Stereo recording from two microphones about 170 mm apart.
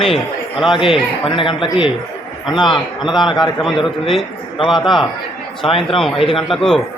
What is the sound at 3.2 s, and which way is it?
Speech, 25° left (ahead or behind).